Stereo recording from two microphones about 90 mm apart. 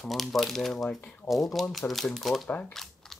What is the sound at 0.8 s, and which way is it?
Speech, 15° left (ahead or behind).